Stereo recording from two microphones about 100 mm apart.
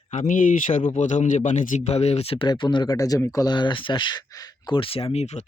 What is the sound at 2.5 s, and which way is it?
Speech, 50° left (ahead or behind).